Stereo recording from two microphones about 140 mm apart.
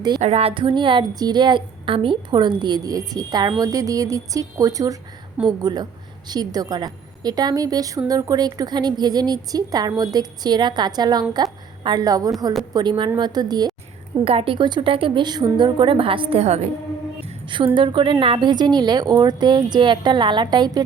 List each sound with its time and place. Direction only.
0.2 s a woman's voice: 50° right (ahead or behind); by 13.7 s 30° right (ahead or behind)
14.3 s a woman's voice: 40° right (ahead or behind)
17.7 s a woman's voice: 35° right (ahead or behind)